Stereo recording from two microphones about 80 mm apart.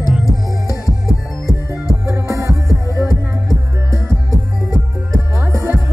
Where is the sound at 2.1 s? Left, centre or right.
Right.